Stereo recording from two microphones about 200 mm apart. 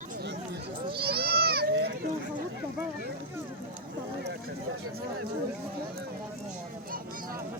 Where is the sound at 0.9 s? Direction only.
50° right (ahead or behind).